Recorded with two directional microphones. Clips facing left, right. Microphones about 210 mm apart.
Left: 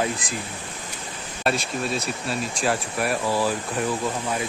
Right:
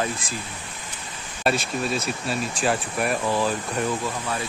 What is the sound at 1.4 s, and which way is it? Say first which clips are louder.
Speech: right 1 dB; centre (ahead or behind).